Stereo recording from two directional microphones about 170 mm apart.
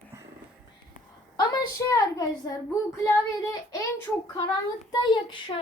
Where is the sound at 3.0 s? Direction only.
15° left (ahead or behind).